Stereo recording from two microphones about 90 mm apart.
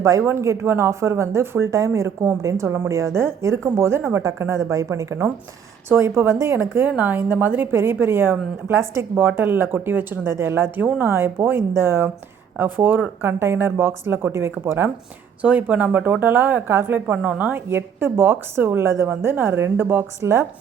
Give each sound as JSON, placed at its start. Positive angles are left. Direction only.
{"t": 0.0, "sound": "speech", "side_deg": -30}
{"t": 15.4, "sound": "speech", "side_deg": -15}